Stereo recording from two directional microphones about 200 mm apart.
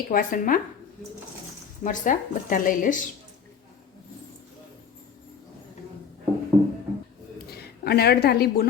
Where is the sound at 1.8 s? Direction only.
40° left (ahead or behind).